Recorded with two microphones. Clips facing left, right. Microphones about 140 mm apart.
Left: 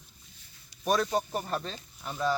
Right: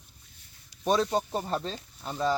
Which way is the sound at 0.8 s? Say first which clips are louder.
Right 2 dB; 25° right (ahead or behind).